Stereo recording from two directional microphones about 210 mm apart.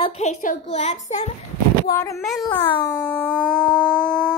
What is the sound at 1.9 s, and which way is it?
Speech, 15° left (ahead or behind).